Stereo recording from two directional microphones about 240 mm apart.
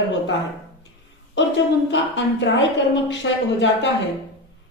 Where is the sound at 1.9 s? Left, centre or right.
Left.